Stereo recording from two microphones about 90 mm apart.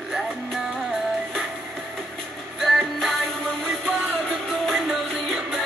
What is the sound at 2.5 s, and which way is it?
Music, centre (ahead or behind).